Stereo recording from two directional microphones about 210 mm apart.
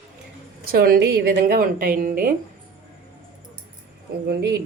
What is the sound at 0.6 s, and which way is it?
Speech, 45° right (ahead or behind).